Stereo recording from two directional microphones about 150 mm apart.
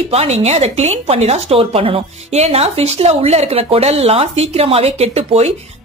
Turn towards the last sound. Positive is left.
turn(degrees=-45)  # may be behind; listen again after turning